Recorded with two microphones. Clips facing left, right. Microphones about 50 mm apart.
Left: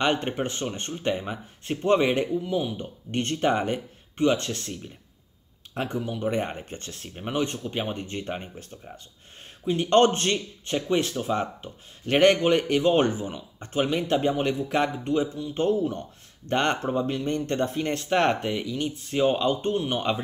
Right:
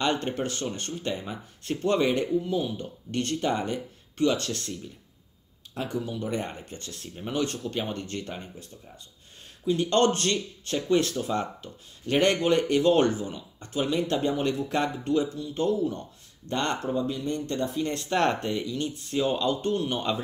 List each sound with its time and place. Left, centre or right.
0.0 s speech: left
5.8 s speech: left
9.7 s speech: left
15.5 s speech: left
18.0 s speech: left